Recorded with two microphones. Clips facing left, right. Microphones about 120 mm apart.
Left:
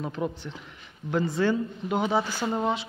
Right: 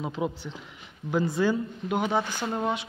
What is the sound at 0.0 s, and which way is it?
Speech, 10° right (ahead or behind).